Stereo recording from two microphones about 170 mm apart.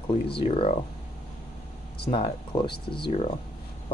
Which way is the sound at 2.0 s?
30° left (ahead or behind).